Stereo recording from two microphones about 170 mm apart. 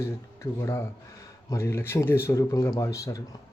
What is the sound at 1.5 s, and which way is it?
Speech, 15° left (ahead or behind).